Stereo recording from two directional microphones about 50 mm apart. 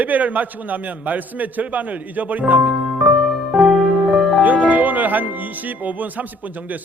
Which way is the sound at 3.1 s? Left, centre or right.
Centre.